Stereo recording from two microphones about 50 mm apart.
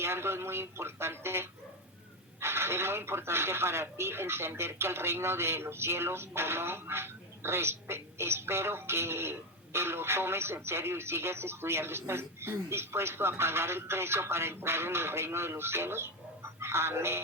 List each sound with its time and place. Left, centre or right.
0.0 s speech: right